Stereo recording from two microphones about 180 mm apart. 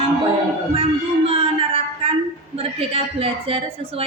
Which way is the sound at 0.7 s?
30° right (ahead or behind).